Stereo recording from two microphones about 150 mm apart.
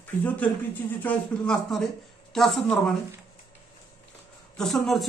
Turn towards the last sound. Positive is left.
turn(degrees=0)  # may be behind; listen again after turning